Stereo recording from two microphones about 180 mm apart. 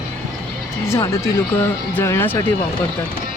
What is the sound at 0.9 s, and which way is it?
Speech, 15° left (ahead or behind).